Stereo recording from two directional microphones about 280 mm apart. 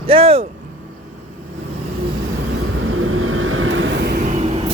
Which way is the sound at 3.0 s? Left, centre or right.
Right.